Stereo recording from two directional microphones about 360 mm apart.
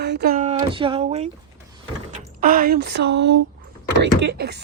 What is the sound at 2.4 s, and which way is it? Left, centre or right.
Speech, right.